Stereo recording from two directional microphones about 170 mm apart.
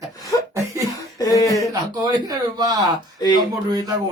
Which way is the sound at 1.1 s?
20° left (ahead or behind).